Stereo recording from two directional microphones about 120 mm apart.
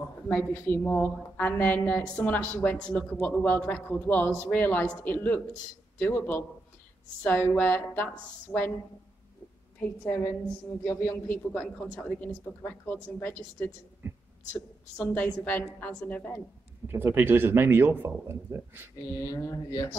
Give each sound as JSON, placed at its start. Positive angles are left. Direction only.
{"t": 0.3, "sound": "a man's voice", "side_deg": 15}
{"t": 10.0, "sound": "a man's voice", "side_deg": 15}
{"t": 14.0, "sound": "a sound", "side_deg": -20}
{"t": 14.5, "sound": "a man's voice", "side_deg": 10}
{"t": 16.8, "sound": "speech", "side_deg": -20}
{"t": 19.1, "sound": "speech", "side_deg": 30}